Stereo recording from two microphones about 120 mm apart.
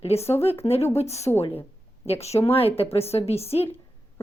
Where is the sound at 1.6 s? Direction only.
55° left (ahead or behind).